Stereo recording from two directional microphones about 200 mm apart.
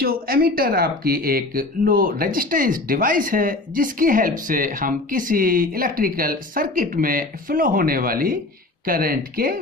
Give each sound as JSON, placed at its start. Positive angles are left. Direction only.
{"t": 0.0, "sound": "speech", "side_deg": -50}